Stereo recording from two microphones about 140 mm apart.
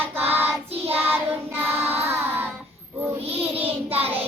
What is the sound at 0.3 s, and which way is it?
Child singing, 15° right (ahead or behind).